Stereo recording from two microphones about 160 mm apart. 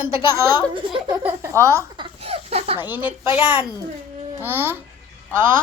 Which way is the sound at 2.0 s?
40° right (ahead or behind).